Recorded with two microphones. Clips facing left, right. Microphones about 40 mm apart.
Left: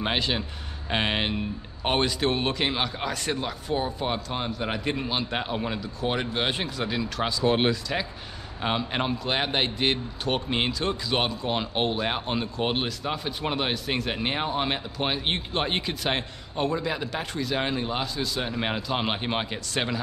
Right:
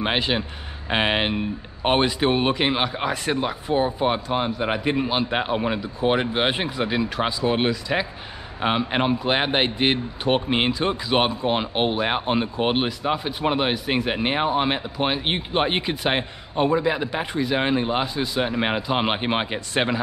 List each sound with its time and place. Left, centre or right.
0.0 s a man's voice: right
7.4 s speech: centre
8.5 s a man's voice: right